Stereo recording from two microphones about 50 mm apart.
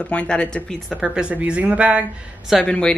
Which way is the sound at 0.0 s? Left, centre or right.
Left.